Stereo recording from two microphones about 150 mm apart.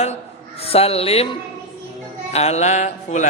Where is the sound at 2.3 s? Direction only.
45° left (ahead or behind).